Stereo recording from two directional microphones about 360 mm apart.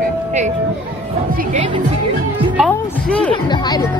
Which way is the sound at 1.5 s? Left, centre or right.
Centre.